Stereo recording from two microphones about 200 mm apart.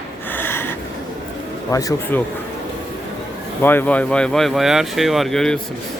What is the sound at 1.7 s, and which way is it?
Speech, 15° left (ahead or behind).